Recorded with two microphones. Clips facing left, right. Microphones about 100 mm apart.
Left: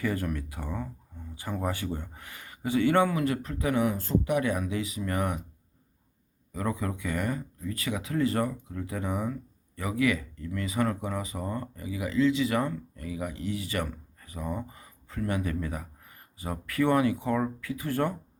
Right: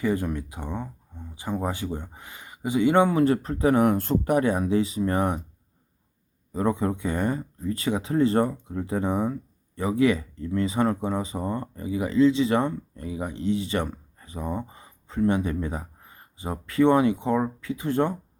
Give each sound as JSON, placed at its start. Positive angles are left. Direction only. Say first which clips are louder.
{"t": 0.0, "sound": "speech", "louder": "right 5 dB", "side_deg": -20}
{"t": 3.8, "sound": "speech", "louder": "right 5 dB", "side_deg": -65}
{"t": 4.2, "sound": "speech", "louder": "right 5 dB", "side_deg": -40}
{"t": 6.5, "sound": "speech", "louder": "right 7 dB", "side_deg": -30}